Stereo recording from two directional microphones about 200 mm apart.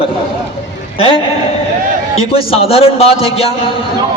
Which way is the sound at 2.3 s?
30° left (ahead or behind).